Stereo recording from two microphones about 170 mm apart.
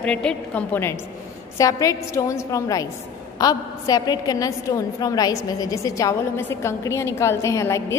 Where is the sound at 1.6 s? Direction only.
20° left (ahead or behind).